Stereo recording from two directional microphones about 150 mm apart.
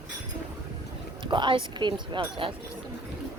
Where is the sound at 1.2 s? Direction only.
30° right (ahead or behind).